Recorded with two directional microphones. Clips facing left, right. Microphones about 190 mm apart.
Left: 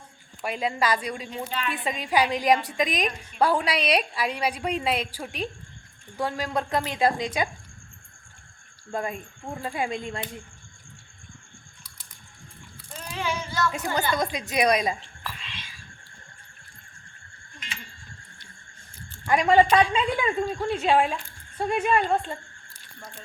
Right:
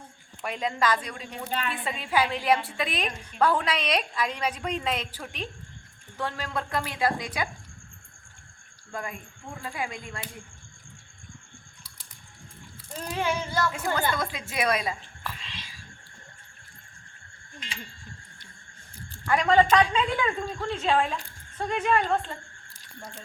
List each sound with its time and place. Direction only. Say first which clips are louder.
0.4 s a woman's voice: left 1 dB; 10° left (ahead or behind)
1.5 s speech: right 2 dB; 45° right (ahead or behind)
1.7 s a woman's voice: left 4 dB; 15° left (ahead or behind)
8.9 s a woman's voice: left 6 dB; 25° left (ahead or behind)
12.9 s speech: right 2 dB; 40° right (ahead or behind)
13.7 s a woman's voice: left 2 dB; 20° left (ahead or behind)
19.3 s a woman's voice: left 2 dB; 15° left (ahead or behind)